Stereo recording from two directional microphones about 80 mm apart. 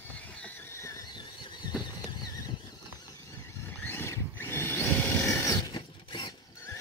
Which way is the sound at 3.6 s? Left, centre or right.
Left.